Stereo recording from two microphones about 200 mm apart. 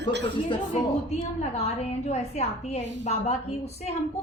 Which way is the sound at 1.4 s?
35° left (ahead or behind).